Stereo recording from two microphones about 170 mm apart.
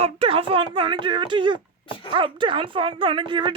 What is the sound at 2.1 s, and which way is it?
Speech, 30° right (ahead or behind).